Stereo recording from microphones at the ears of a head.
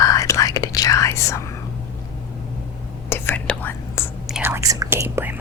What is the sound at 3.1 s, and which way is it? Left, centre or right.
Whispering, left.